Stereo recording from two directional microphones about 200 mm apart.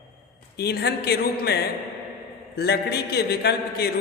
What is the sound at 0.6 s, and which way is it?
A man's voice, 55° left (ahead or behind).